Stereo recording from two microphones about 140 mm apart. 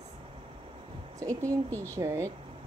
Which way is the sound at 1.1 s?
25° right (ahead or behind).